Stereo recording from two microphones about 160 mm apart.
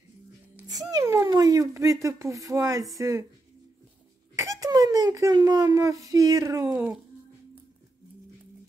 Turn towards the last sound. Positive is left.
turn(degrees=-15)  # may be behind; listen again after turning